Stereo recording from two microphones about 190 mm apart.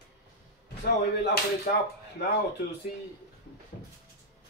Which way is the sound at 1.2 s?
60° left (ahead or behind).